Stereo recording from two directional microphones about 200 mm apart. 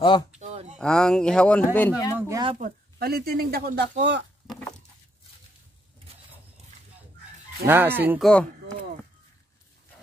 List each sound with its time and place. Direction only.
0.4 s a sound: 35° right (ahead or behind)
0.7 s speech: 5° left (ahead or behind)
2.1 s a sound: 15° right (ahead or behind)
2.6 s speech: 50° right (ahead or behind)
7.6 s fowl: 10° right (ahead or behind)
8.1 s speech: centre (ahead or behind)